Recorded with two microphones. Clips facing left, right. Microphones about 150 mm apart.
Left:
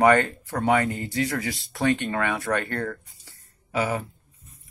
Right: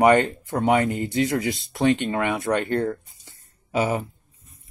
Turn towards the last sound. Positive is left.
turn(degrees=-20)  # may be behind; listen again after turning